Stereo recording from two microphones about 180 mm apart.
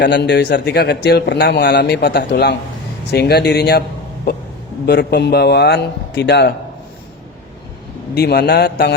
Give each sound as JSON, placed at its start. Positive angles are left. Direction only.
{"t": 0.0, "sound": "a man's voice", "side_deg": 70}
{"t": 8.1, "sound": "a man's voice", "side_deg": 65}